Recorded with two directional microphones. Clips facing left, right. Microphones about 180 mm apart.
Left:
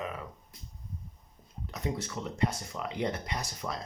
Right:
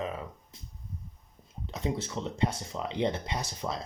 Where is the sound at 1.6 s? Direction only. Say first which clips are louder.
Right 2 dB; 25° right (ahead or behind).